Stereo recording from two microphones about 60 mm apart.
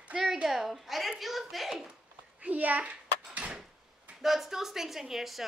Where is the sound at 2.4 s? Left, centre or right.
Right.